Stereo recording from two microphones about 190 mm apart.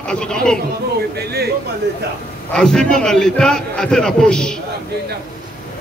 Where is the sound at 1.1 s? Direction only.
55° right (ahead or behind).